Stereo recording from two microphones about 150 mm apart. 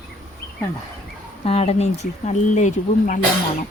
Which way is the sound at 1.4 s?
45° left (ahead or behind).